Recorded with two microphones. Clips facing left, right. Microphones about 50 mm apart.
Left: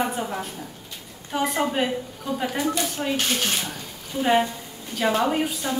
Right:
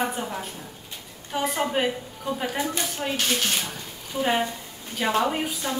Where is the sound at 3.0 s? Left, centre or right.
Centre.